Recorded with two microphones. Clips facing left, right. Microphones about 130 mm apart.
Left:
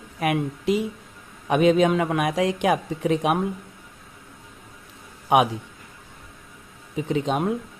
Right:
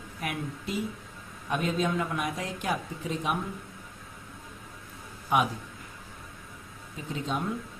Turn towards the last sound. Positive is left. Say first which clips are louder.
# left 9 dB
turn(degrees=75)  # may be behind; listen again after turning